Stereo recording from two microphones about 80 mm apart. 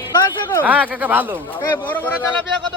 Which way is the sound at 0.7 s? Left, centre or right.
Centre.